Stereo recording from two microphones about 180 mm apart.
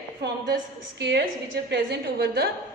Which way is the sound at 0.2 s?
70° right (ahead or behind).